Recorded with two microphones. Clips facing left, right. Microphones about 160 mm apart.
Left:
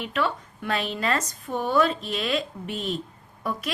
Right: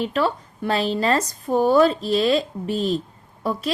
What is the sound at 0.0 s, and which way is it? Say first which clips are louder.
A woman's voice: right 5 dB; 35° right (ahead or behind).